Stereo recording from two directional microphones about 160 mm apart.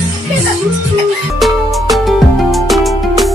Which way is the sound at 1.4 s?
Centre (ahead or behind).